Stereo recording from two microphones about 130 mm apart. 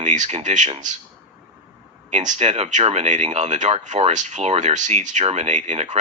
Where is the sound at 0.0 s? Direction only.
70° right (ahead or behind).